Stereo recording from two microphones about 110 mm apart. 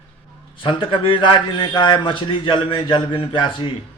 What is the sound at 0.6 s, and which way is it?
Speech, 50° left (ahead or behind).